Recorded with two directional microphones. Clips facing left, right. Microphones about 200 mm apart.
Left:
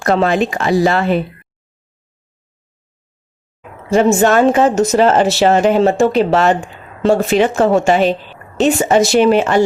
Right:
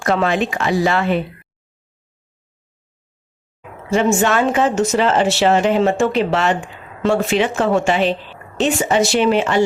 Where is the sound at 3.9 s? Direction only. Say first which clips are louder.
Left 5 dB; 40° left (ahead or behind).